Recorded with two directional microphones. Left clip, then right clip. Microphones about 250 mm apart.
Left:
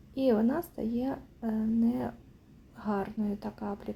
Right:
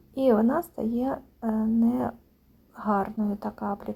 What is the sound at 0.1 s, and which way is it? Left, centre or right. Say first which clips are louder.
A woman's voice: right 5 dB; centre.